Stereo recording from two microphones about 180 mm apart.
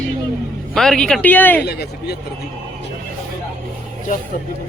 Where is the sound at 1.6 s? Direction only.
65° left (ahead or behind).